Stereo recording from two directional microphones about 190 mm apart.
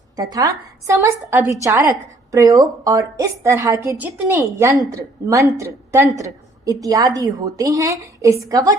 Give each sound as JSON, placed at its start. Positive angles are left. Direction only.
{"t": 0.2, "sound": "a woman's voice", "side_deg": -20}